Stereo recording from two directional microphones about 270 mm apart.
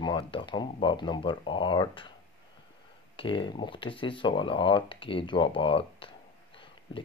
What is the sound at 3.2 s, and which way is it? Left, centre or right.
Speech, centre.